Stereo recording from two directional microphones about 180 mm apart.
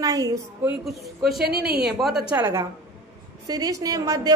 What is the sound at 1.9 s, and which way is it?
Speech, centre (ahead or behind).